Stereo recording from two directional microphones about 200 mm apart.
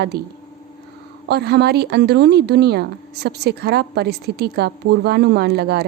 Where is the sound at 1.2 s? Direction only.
55° right (ahead or behind).